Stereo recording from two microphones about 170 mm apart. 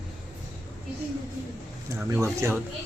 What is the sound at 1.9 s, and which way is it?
Speech, 15° right (ahead or behind).